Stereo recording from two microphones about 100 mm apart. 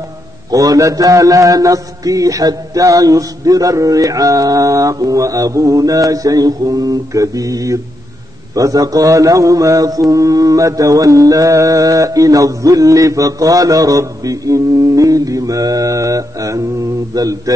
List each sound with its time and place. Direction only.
0.5 s mantra: 35° right (ahead or behind)